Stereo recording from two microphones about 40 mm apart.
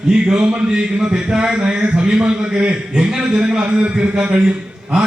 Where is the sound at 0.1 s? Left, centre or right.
Right.